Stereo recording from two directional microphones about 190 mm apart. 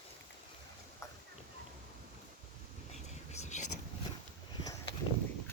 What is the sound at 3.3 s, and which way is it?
Whispering, 35° left (ahead or behind).